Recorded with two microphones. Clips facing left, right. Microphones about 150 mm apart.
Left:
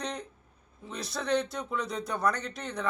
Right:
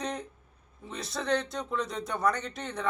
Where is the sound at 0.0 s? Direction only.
Centre (ahead or behind).